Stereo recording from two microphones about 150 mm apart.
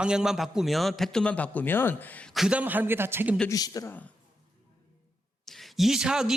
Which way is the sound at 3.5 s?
25° left (ahead or behind).